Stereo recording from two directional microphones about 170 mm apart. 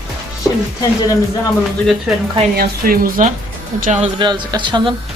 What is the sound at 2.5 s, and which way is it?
Speech, 60° right (ahead or behind).